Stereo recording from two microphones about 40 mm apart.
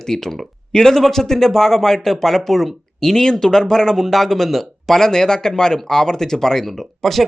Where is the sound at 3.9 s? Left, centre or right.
Centre.